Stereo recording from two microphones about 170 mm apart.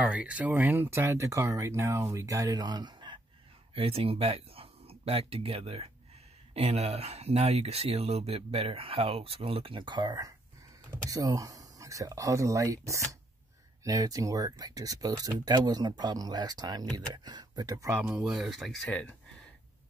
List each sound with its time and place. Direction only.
0.0 s speech: 5° right (ahead or behind)
18.0 s speech: 5° right (ahead or behind)